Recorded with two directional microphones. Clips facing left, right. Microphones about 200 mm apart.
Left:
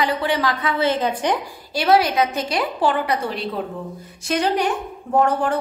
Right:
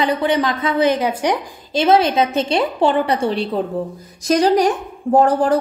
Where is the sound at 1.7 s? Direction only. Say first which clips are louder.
Right 3 dB; 20° right (ahead or behind).